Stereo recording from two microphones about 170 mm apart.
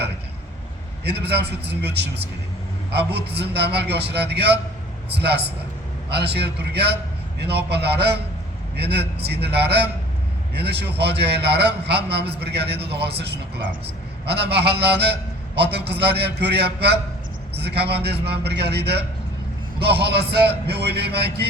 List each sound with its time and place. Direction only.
1.0 s a man's voice: 75° right (ahead or behind)